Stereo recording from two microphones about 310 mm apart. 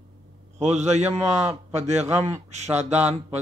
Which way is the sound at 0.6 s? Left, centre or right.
Right.